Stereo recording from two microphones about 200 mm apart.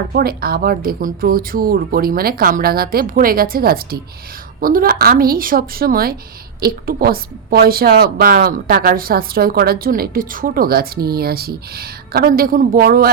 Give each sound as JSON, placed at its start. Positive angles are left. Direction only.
{"t": 0.1, "sound": "a woman's voice", "side_deg": -50}